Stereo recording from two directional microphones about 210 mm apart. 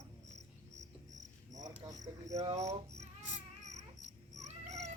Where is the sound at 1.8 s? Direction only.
15° right (ahead or behind).